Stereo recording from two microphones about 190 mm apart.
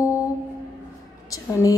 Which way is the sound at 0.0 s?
15° left (ahead or behind).